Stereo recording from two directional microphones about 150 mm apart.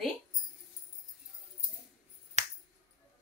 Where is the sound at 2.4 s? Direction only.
50° right (ahead or behind).